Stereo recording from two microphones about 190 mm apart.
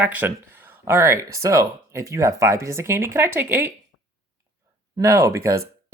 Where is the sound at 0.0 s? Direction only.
10° right (ahead or behind).